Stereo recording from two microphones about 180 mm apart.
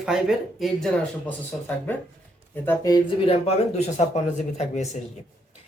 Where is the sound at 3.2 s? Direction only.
35° left (ahead or behind).